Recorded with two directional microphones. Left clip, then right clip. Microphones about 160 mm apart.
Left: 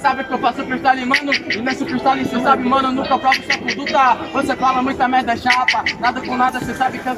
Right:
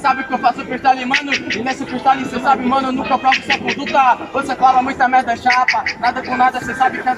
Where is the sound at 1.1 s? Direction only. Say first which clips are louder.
Even; 30° left (ahead or behind).